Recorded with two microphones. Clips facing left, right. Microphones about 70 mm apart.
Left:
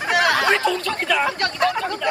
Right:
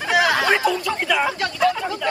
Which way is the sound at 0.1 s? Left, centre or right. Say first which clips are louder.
Even; centre.